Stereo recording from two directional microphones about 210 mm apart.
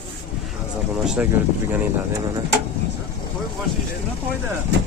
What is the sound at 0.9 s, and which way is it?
Speech, 5° right (ahead or behind).